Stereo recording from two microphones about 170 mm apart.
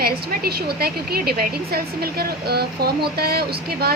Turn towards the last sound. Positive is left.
turn(degrees=-65)  # may be behind; listen again after turning